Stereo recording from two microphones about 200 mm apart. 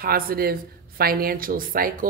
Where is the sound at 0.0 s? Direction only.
50° right (ahead or behind).